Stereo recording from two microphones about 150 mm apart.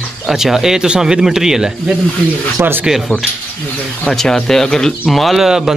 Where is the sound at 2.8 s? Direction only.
Centre (ahead or behind).